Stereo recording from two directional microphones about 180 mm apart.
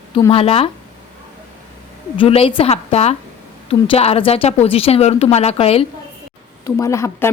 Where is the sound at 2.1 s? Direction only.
30° left (ahead or behind).